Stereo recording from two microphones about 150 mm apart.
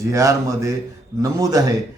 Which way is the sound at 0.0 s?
20° right (ahead or behind).